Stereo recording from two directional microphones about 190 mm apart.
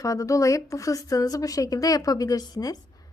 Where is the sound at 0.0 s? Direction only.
15° left (ahead or behind).